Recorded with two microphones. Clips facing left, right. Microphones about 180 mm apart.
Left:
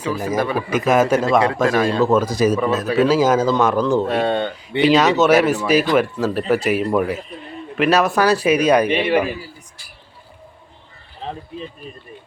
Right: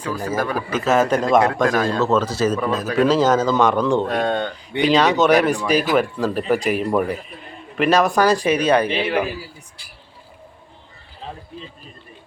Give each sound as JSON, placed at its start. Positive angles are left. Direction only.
{"t": 0.0, "sound": "a man's voice", "side_deg": 10}
{"t": 2.6, "sound": "a man's voice", "side_deg": 0}